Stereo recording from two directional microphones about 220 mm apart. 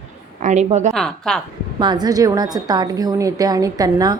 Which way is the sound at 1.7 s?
20° right (ahead or behind).